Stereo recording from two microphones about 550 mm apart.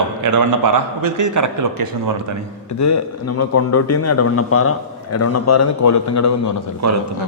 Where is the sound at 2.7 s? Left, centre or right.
Left.